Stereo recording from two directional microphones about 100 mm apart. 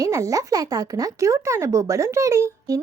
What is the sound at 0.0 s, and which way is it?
A woman's voice, 35° right (ahead or behind).